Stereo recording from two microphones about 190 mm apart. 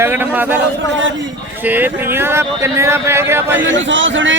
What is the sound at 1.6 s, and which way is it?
Speech, 10° right (ahead or behind).